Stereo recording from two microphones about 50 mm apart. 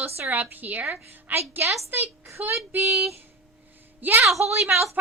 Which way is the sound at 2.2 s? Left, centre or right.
Right.